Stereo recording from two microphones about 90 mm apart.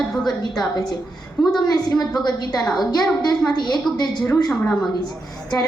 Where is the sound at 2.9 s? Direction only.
50° left (ahead or behind).